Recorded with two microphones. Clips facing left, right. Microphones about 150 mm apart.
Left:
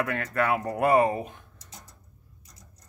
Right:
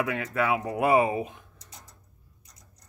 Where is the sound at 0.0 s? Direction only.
5° right (ahead or behind).